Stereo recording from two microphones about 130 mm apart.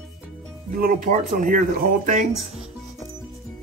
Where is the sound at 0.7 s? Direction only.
90° right.